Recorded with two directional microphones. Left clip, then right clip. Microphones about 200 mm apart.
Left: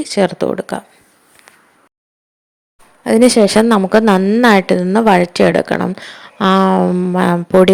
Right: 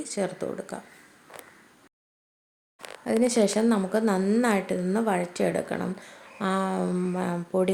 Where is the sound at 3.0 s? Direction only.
45° left (ahead or behind).